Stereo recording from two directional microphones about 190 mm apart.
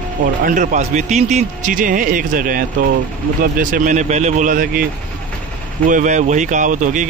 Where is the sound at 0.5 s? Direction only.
40° right (ahead or behind).